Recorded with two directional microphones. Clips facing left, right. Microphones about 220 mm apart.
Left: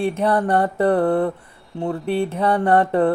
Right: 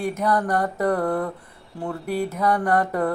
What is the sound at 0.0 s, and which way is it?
Speech, 30° left (ahead or behind).